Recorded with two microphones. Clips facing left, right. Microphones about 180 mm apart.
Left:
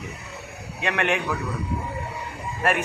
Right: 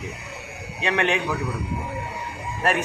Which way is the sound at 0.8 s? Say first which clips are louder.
Right 1 dB; 30° right (ahead or behind).